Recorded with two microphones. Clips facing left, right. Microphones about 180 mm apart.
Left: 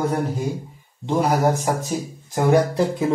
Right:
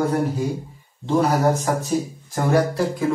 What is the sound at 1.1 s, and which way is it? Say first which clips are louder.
Speech: right 1 dB; 15° left (ahead or behind).